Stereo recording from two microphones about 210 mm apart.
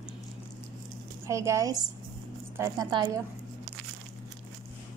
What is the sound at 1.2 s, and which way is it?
A woman's voice, 15° right (ahead or behind).